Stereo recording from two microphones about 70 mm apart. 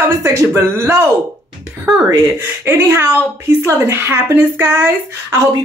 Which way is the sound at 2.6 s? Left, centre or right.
Right.